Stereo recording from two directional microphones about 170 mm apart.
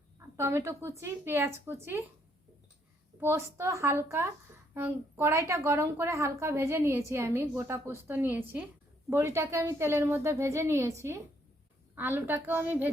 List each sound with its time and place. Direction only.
0.3 s a woman's voice: 15° right (ahead or behind)
3.2 s a woman's voice: 15° right (ahead or behind)
11.9 s a woman's voice: 10° right (ahead or behind)